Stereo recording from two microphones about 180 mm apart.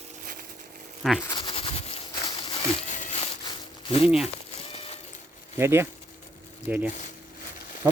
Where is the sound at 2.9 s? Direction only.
40° left (ahead or behind).